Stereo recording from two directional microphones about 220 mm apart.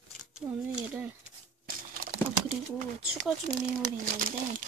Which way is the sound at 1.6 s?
40° right (ahead or behind).